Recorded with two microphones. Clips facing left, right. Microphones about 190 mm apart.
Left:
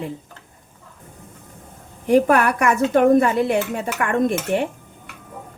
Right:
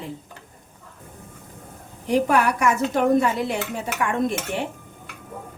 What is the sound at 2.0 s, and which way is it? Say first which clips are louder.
A woman's voice: left 4 dB; 55° left (ahead or behind).